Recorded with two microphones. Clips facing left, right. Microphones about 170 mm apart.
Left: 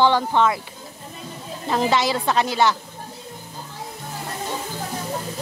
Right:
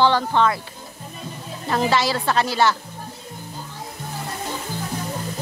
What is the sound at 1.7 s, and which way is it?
Speech, 20° left (ahead or behind).